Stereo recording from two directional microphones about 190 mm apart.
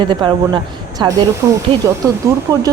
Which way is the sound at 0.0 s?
25° right (ahead or behind).